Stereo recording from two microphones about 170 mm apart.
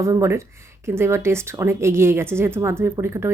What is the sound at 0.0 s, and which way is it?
A woman's voice, 15° right (ahead or behind).